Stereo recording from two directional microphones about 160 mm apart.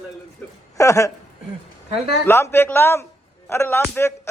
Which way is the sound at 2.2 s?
15° left (ahead or behind).